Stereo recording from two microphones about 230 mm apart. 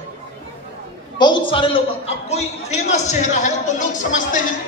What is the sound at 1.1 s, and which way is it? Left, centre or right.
A man's voice, centre.